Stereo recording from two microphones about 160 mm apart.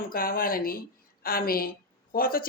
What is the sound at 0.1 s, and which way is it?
A woman's voice, 65° left (ahead or behind).